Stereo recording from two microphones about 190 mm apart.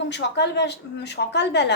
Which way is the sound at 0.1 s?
65° left (ahead or behind).